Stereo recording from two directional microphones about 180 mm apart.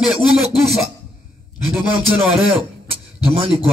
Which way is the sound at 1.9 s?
30° right (ahead or behind).